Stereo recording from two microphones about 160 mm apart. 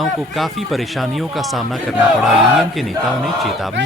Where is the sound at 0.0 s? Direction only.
Centre (ahead or behind).